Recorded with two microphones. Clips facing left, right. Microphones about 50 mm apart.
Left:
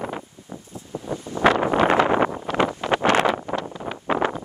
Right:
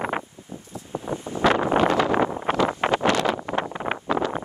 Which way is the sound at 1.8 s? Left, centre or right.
Left.